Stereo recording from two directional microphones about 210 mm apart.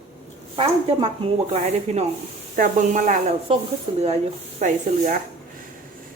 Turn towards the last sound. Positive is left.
turn(degrees=-35)  # may be behind; listen again after turning